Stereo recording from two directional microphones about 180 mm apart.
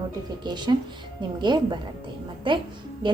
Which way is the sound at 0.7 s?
25° right (ahead or behind).